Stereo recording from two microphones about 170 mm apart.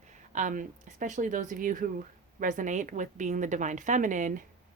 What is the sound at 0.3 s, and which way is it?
Speech, 50° right (ahead or behind).